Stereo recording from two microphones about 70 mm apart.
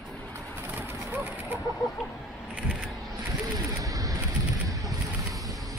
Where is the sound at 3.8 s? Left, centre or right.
Right.